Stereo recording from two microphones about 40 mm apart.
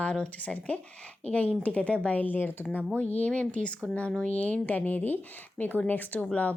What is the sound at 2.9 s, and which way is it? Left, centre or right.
A woman's voice, left.